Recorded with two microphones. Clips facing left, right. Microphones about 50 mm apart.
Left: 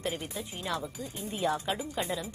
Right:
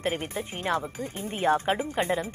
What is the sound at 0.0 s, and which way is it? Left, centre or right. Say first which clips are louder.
A woman's voice: right 5 dB; right.